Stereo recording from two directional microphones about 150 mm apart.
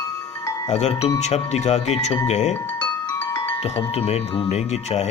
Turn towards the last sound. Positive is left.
turn(degrees=45)  # may be behind; listen again after turning